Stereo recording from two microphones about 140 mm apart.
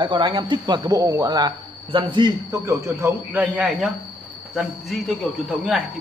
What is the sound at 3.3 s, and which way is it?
A man's voice, 5° right (ahead or behind).